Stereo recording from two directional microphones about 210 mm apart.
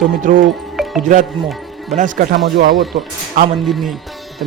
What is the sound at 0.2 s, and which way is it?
Speech, 40° right (ahead or behind).